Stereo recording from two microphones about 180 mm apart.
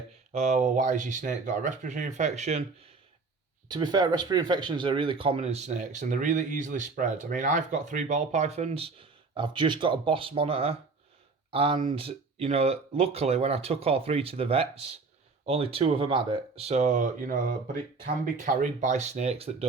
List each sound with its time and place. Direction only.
0.3 s speech: 40° right (ahead or behind)
3.7 s speech: 25° right (ahead or behind)